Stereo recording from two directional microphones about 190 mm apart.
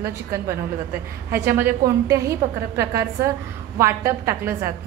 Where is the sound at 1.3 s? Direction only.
10° right (ahead or behind).